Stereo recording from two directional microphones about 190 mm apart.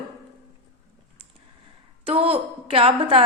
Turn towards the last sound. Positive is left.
turn(degrees=-30)  # may be behind; listen again after turning